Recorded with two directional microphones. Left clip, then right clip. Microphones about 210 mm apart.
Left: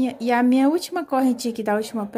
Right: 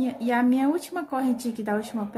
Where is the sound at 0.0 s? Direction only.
40° left (ahead or behind).